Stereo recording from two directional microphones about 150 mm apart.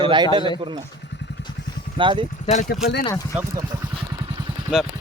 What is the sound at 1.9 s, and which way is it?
Speech, 35° right (ahead or behind).